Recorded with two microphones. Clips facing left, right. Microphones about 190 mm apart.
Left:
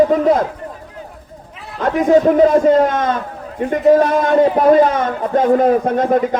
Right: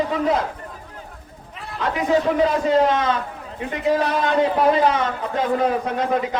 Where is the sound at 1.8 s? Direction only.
45° left (ahead or behind).